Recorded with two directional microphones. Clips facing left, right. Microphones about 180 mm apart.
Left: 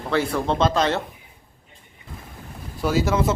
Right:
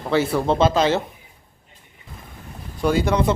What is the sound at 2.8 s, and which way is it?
Speech, 5° left (ahead or behind).